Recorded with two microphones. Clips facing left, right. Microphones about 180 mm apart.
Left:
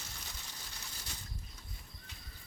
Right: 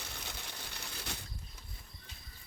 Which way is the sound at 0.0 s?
65° right (ahead or behind).